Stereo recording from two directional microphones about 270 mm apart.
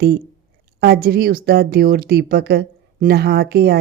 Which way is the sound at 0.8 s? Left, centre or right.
Right.